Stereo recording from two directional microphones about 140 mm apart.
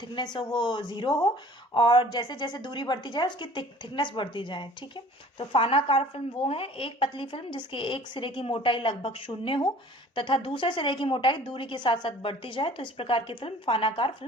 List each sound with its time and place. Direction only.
0.3 s a woman's voice: 35° left (ahead or behind)